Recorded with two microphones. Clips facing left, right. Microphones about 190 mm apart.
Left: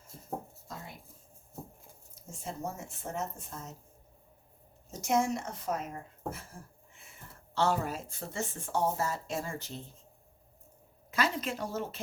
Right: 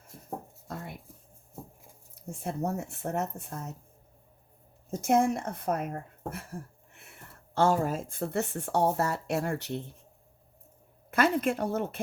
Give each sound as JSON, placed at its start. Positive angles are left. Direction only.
{"t": 0.7, "sound": "writing", "side_deg": -60}
{"t": 2.1, "sound": "speech", "side_deg": -60}
{"t": 4.9, "sound": "speech", "side_deg": -55}
{"t": 11.1, "sound": "speech", "side_deg": -55}